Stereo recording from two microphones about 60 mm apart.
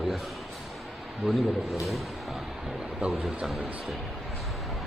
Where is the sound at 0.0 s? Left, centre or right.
Centre.